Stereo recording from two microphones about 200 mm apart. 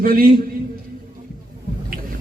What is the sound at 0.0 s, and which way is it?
Speech, 45° right (ahead or behind).